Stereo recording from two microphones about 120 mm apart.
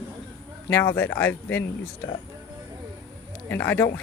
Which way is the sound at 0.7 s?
15° left (ahead or behind).